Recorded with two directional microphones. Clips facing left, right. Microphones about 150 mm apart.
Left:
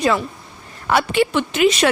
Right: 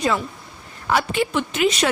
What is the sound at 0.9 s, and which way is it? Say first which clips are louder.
Speech: left 3 dB; 70° left (ahead or behind).